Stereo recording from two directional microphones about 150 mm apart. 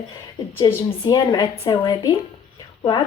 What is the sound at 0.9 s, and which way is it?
A woman's voice, 30° left (ahead or behind).